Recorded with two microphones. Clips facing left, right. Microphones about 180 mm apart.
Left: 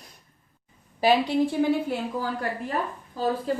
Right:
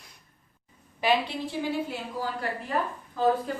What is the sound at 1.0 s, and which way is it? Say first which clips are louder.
Speech: left 5 dB; 45° left (ahead or behind).